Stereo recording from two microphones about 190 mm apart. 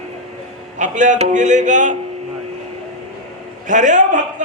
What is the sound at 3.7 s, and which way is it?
Speech, 40° right (ahead or behind).